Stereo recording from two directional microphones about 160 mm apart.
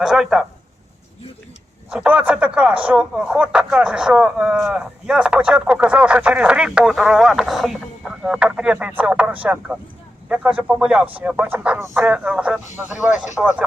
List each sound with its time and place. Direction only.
0.0 s speech: 5° right (ahead or behind)
1.9 s speech: 5° right (ahead or behind)
12.6 s speech: 50° left (ahead or behind)
13.4 s speech: centre (ahead or behind)